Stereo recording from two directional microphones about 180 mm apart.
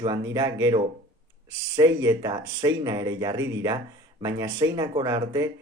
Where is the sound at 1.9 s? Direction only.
20° right (ahead or behind).